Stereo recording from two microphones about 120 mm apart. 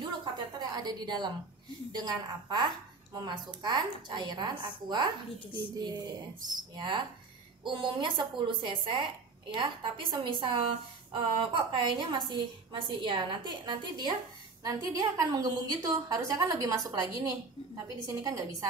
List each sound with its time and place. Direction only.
0.2 s a woman's voice: 35° right (ahead or behind)
7.6 s a woman's voice: 40° right (ahead or behind)